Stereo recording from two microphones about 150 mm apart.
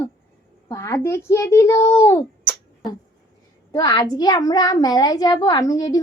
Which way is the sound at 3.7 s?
25° left (ahead or behind).